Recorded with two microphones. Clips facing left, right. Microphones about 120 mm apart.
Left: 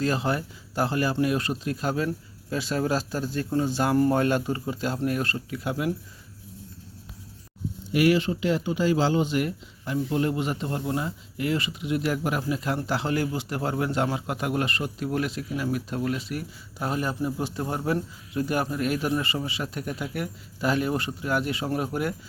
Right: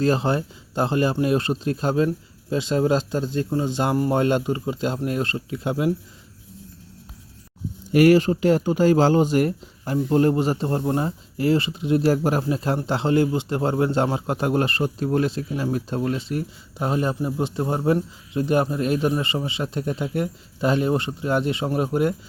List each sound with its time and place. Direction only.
0.0 s speech: 30° right (ahead or behind)
7.9 s speech: 45° right (ahead or behind); by 22.1 s 25° right (ahead or behind)